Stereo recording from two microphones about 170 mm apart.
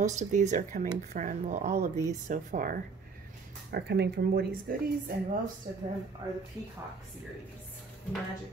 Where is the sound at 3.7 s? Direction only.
75° right (ahead or behind).